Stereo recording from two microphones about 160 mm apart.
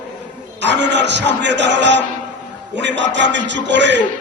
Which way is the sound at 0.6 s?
90° right.